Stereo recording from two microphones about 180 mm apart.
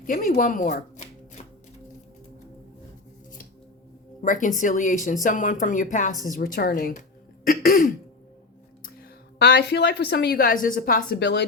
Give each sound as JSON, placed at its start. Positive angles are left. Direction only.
{"t": 0.0, "sound": "speech", "side_deg": 50}
{"t": 4.2, "sound": "speech", "side_deg": 45}
{"t": 7.4, "sound": "throat clearing", "side_deg": 50}
{"t": 8.8, "sound": "a woman's voice", "side_deg": 60}